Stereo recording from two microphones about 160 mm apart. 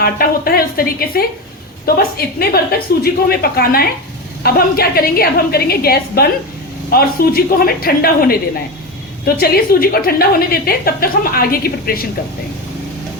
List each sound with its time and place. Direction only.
0.0 s a woman's voice: 70° left (ahead or behind)